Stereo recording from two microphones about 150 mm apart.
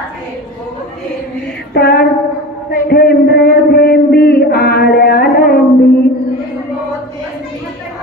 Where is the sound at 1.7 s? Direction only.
90° left.